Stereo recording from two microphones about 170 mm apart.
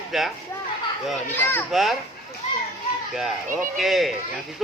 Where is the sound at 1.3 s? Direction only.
10° left (ahead or behind).